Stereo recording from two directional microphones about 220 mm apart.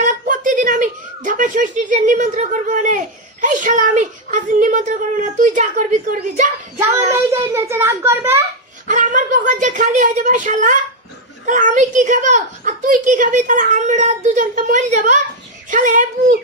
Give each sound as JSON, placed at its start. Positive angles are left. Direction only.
{"t": 0.0, "sound": "a woman's voice", "side_deg": -35}
{"t": 7.1, "sound": "a child's voice", "side_deg": -10}
{"t": 8.9, "sound": "a woman's voice", "side_deg": -35}